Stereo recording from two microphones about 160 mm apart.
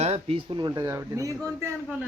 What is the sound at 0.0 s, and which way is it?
Speech, 40° right (ahead or behind).